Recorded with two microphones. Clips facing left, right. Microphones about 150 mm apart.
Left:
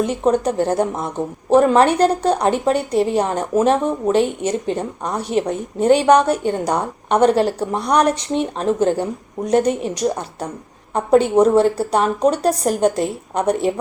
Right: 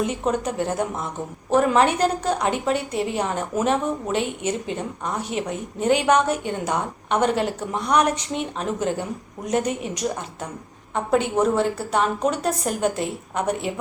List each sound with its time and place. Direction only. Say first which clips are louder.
0.0 s a woman's voice: left 6 dB; 35° left (ahead or behind)